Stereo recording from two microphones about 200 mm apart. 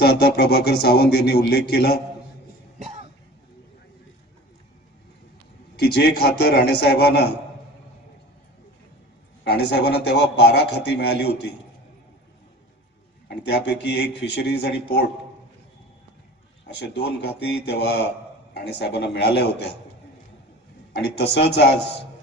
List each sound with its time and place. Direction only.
0.0 s speech: 50° left (ahead or behind)
5.8 s speech: 55° left (ahead or behind)
9.4 s a man's voice: 55° left (ahead or behind)
13.3 s a man's voice: 60° left (ahead or behind)
16.8 s a man's voice: 60° left (ahead or behind)
20.9 s a man's voice: 55° left (ahead or behind)